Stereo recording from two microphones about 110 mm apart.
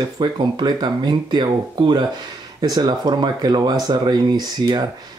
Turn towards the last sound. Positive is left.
turn(degrees=-40)  # may be behind; listen again after turning